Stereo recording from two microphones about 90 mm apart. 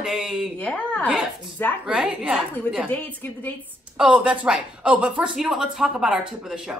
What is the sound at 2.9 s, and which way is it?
Speech, 15° left (ahead or behind).